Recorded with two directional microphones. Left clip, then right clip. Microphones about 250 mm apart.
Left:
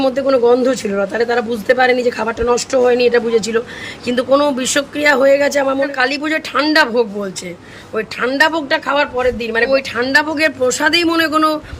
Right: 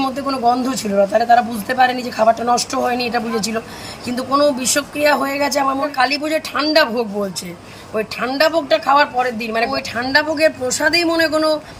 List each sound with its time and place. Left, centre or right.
0.0 s speech: centre
4.2 s speech: centre
4.4 s speech: centre
7.9 s speech: centre